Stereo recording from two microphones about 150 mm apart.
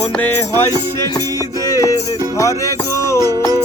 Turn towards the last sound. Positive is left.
turn(degrees=20)  # may be behind; listen again after turning